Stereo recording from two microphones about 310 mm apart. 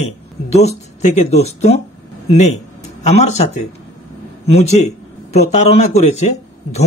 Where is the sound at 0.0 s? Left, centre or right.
Left.